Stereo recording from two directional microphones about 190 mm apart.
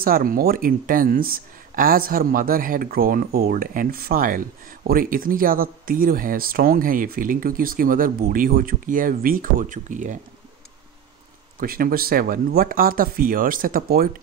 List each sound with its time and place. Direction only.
0.0 s speech: 50° right (ahead or behind)
11.6 s speech: 50° right (ahead or behind)